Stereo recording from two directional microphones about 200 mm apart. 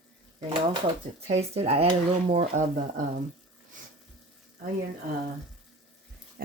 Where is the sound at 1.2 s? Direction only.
30° right (ahead or behind).